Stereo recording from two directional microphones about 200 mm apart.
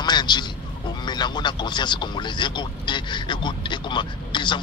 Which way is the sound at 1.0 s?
20° left (ahead or behind).